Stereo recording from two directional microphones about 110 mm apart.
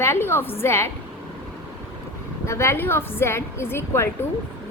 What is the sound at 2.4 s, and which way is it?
A woman's voice, 25° left (ahead or behind).